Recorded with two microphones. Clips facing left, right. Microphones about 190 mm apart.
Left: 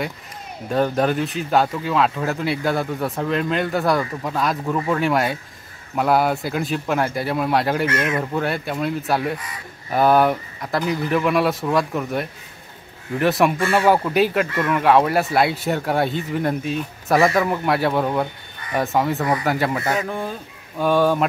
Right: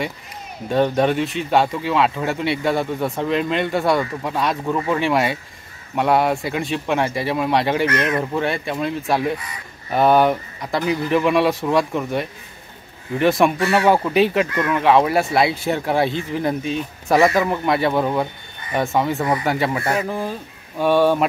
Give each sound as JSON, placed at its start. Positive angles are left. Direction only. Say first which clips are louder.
{"t": 0.7, "sound": "speech", "louder": "right 2 dB", "side_deg": 0}